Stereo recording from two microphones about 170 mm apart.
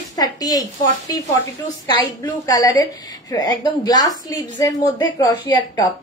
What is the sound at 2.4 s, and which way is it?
A woman's voice, 20° left (ahead or behind).